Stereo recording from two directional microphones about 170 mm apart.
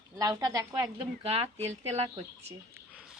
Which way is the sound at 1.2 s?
35° right (ahead or behind).